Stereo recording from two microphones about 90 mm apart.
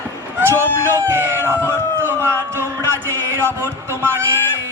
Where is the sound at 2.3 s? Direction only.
30° right (ahead or behind).